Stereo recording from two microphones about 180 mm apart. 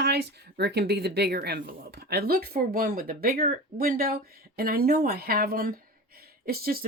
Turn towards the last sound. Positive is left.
turn(degrees=-55)  # may be behind; listen again after turning